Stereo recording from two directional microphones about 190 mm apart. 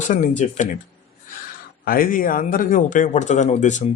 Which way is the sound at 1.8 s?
50° left (ahead or behind).